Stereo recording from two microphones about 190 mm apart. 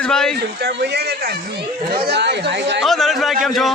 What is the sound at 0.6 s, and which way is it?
Speech, 60° right (ahead or behind).